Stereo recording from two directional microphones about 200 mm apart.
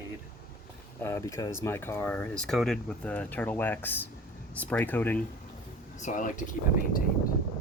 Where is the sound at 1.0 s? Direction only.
15° left (ahead or behind).